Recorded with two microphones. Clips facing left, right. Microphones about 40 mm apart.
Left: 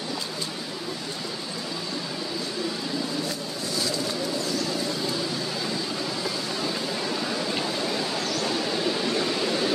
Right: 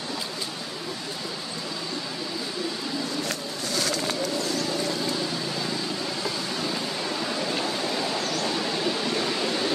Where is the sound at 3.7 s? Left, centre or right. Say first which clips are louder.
Right 1 dB; right.